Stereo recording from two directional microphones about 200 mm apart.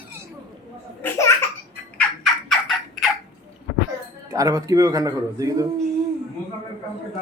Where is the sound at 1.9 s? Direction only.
Centre (ahead or behind).